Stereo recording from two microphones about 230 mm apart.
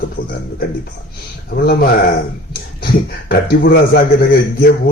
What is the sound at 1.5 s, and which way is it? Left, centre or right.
A man's voice, left.